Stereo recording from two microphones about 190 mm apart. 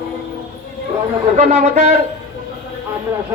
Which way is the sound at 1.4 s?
40° right (ahead or behind).